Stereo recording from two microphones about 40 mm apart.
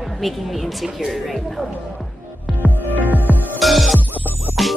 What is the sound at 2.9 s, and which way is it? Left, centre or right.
Music, left.